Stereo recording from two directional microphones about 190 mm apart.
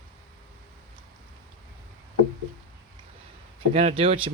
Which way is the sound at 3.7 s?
35° right (ahead or behind).